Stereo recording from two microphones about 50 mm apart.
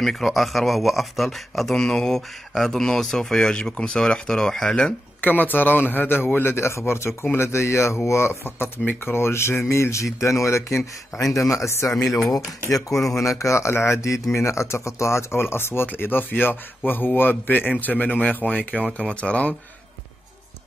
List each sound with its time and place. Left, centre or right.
0.0 s speech: centre
1.8 s speech: centre
5.2 s a man's voice: left
6.4 s speech: left
9.7 s speech: left
11.3 s speech: left
12.9 s speech: centre
13.2 s speech: left
15.4 s speech: left
15.9 s a man's voice: left